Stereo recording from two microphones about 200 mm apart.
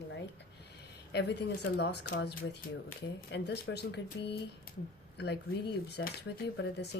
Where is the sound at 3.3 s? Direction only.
55° left (ahead or behind).